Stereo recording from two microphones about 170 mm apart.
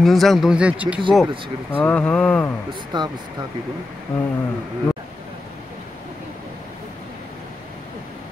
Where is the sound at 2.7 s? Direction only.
25° right (ahead or behind).